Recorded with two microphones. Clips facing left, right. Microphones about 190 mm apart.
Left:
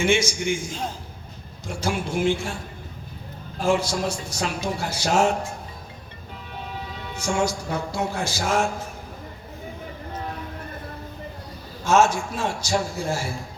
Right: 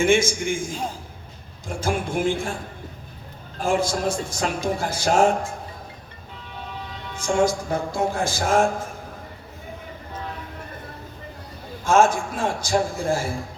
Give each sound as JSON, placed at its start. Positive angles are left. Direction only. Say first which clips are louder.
{"t": 0.0, "sound": "a man's voice", "louder": "right 2 dB", "side_deg": -50}
{"t": 3.6, "sound": "a man's voice", "louder": "even", "side_deg": -50}
{"t": 7.3, "sound": "a man's voice", "louder": "right 4 dB", "side_deg": -50}
{"t": 11.9, "sound": "a man's voice", "louder": "right 1 dB", "side_deg": -50}